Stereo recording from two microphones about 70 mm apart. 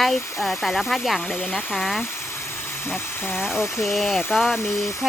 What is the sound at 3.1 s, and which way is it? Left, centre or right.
Speech, left.